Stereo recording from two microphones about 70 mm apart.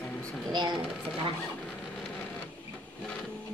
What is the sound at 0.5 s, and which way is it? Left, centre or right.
Speech, right.